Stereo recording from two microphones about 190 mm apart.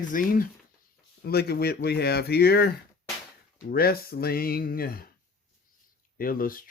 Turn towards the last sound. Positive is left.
turn(degrees=50)  # may be behind; listen again after turning